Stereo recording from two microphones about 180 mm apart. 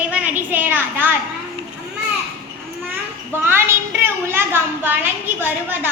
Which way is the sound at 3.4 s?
15° right (ahead or behind).